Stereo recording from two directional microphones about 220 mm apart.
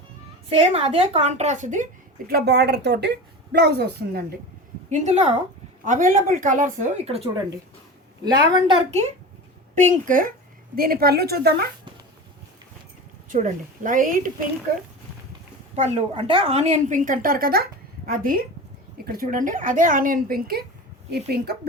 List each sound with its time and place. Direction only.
0.7 s a woman's voice: 25° right (ahead or behind); by 4.2 s 45° right (ahead or behind)
4.9 s a woman's voice: 30° right (ahead or behind)
8.2 s a woman's voice: 20° right (ahead or behind)
10.1 s a woman's voice: 40° right (ahead or behind)
13.2 s a woman's voice: 35° right (ahead or behind)
15.7 s a woman's voice: 30° right (ahead or behind); by 21.7 s 45° right (ahead or behind)